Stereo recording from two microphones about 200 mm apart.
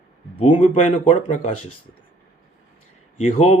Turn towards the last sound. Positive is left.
turn(degrees=30)  # may be behind; listen again after turning